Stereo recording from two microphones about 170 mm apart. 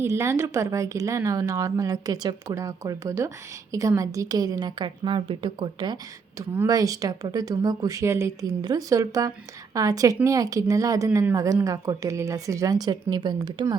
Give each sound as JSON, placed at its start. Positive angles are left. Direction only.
{"t": 0.0, "sound": "speech", "side_deg": -15}